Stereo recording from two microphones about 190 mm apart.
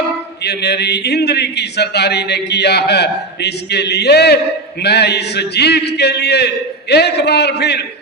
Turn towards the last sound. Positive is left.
turn(degrees=60)  # may be behind; listen again after turning